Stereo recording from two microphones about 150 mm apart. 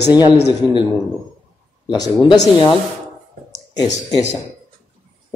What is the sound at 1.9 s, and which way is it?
Speech, 30° left (ahead or behind).